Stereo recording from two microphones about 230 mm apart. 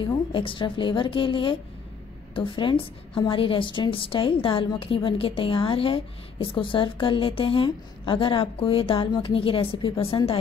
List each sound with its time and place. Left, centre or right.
0.0 s a woman's voice: left